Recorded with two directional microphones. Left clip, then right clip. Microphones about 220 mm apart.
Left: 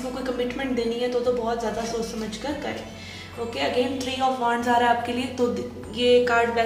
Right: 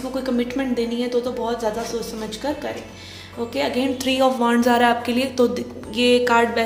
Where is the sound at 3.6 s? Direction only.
50° right (ahead or behind).